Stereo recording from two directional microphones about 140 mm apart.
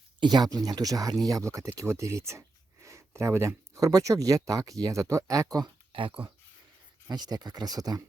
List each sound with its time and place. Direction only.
0.2 s speech: 30° right (ahead or behind)
5.9 s speech: 40° right (ahead or behind)
7.1 s speech: 30° right (ahead or behind)